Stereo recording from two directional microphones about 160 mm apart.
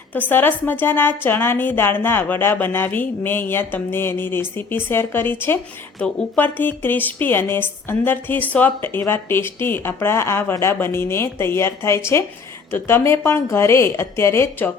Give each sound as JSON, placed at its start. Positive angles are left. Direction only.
{"t": 0.1, "sound": "a woman's voice", "side_deg": 10}